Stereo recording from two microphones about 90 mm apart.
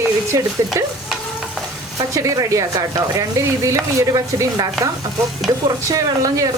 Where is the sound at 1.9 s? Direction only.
40° right (ahead or behind).